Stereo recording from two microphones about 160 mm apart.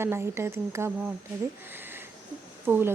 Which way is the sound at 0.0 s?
15° right (ahead or behind).